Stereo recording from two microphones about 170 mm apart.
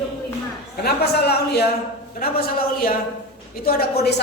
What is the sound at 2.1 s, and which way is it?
A man's voice, 60° left (ahead or behind).